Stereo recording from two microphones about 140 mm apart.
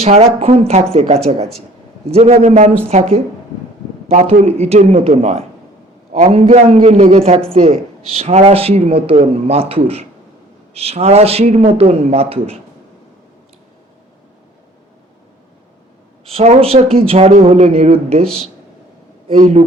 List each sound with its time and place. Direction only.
0.0 s speech: 45° right (ahead or behind)
4.2 s speech: 50° right (ahead or behind)
16.3 s speech: 50° right (ahead or behind)
19.4 s speech: 50° right (ahead or behind)